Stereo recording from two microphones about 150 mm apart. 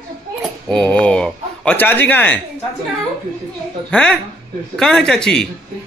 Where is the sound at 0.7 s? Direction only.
5° left (ahead or behind).